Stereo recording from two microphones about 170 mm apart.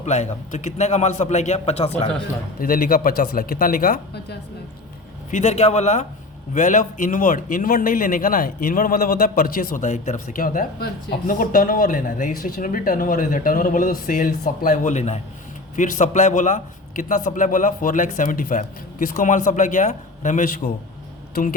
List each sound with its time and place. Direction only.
0.0 s a man's voice: 40° left (ahead or behind)
2.6 s speech: 55° left (ahead or behind)
5.3 s a man's voice: 40° left (ahead or behind)